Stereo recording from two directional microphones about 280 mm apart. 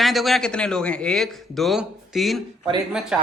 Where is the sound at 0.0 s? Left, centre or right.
Centre.